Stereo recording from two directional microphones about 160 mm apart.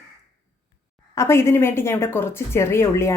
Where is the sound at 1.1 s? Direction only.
15° left (ahead or behind).